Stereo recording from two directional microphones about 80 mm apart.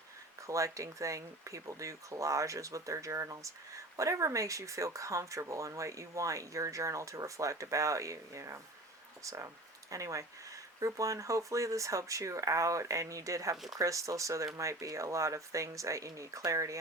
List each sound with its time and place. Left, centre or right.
0.4 s speech: right